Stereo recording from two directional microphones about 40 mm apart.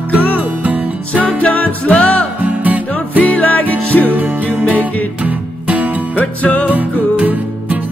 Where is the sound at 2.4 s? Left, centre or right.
Right.